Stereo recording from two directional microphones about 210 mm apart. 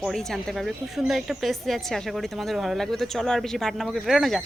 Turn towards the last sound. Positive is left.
turn(degrees=0)  # may be behind; listen again after turning